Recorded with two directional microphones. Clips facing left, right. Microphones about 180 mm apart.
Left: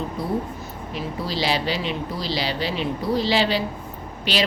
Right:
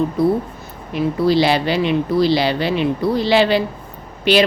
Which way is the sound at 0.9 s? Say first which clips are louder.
Right 12 dB; 60° right (ahead or behind).